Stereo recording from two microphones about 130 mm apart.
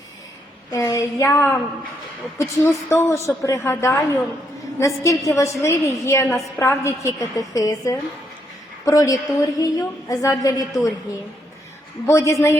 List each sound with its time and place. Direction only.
0.7 s a woman's voice: 25° left (ahead or behind)
12.0 s a woman's voice: 20° left (ahead or behind)